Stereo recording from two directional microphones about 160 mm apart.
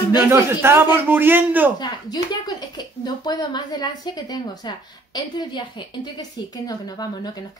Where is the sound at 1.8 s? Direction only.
25° left (ahead or behind).